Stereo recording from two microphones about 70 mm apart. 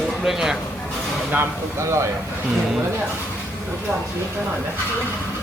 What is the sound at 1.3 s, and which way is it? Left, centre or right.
Speech, right.